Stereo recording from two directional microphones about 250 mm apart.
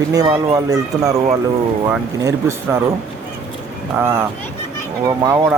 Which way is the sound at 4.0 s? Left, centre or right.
Centre.